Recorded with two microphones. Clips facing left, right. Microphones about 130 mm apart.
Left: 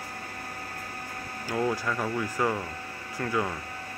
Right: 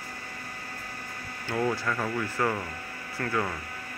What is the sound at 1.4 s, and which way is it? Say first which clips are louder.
A man's voice: even; 10° left (ahead or behind).